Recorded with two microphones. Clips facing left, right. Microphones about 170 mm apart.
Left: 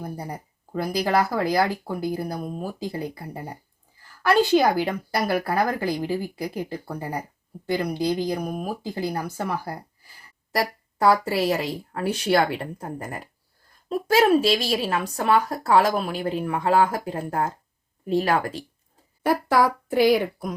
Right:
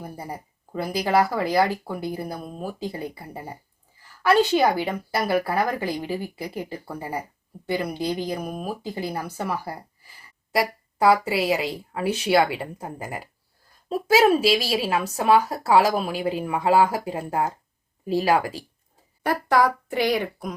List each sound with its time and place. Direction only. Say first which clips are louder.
0.0 s speech: left 2 dB; 5° right (ahead or behind)
19.2 s speech: even; 5° left (ahead or behind)